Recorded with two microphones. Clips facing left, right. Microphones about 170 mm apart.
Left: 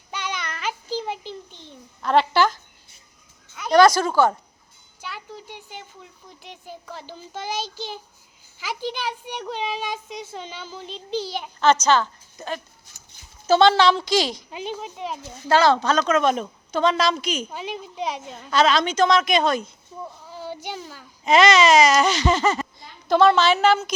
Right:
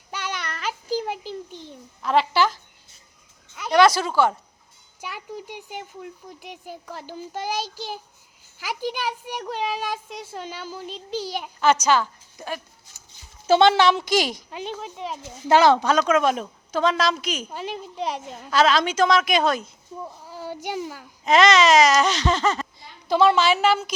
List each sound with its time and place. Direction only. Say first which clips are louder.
0.1 s child singing: even; 5° right (ahead or behind)
0.9 s a sound: right 2 dB; 10° right (ahead or behind)
3.6 s a sound: left 2 dB; 5° right (ahead or behind)
4.9 s a child's voice: right 2 dB; 15° right (ahead or behind)
13.5 s speech: even; 20° right (ahead or behind)
14.5 s a woman's voice: left 1 dB; centre (ahead or behind)
15.4 s a woman's voice: right 1 dB; 15° right (ahead or behind)
20.3 s child singing: even; 10° right (ahead or behind)
20.7 s a child's voice: right 5 dB; 10° right (ahead or behind)
21.2 s a woman's voice: left 1 dB; centre (ahead or behind)
23.0 s a child's voice: left 2 dB; 10° right (ahead or behind)